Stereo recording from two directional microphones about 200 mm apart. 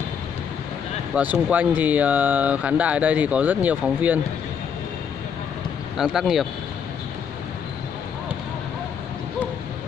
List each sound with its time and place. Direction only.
1.1 s speech: 5° right (ahead or behind)
5.9 s speech: centre (ahead or behind)